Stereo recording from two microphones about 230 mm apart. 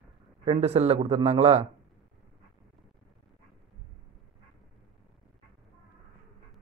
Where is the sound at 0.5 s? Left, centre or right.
Right.